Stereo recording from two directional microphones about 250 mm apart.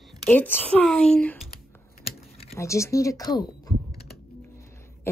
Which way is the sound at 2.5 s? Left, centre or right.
Centre.